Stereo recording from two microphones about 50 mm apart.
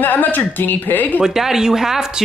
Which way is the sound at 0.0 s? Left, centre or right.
Left.